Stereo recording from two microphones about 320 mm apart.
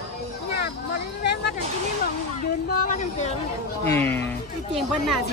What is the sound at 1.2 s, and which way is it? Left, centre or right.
Speech, left.